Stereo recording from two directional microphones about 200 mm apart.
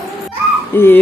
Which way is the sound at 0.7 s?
10° left (ahead or behind).